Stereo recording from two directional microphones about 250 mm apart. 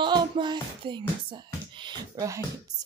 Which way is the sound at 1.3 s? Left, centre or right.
Centre.